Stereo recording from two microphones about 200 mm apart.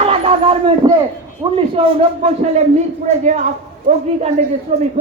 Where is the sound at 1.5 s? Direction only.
30° right (ahead or behind).